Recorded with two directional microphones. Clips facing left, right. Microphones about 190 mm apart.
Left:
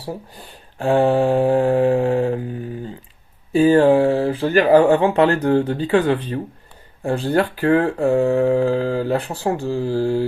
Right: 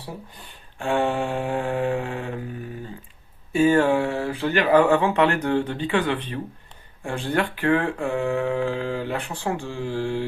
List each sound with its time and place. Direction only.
0.0 s speech: 35° left (ahead or behind)
3.5 s speech: 35° left (ahead or behind)